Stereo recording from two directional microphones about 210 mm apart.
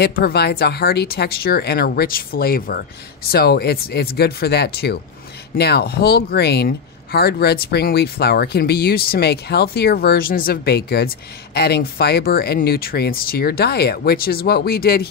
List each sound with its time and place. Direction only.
0.0 s speech: 50° left (ahead or behind)